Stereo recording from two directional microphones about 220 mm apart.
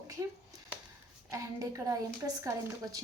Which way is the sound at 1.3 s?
15° right (ahead or behind).